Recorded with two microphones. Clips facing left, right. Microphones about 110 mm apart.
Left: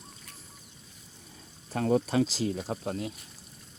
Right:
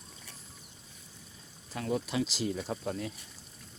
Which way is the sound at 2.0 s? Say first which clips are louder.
Left 5 dB; 40° left (ahead or behind).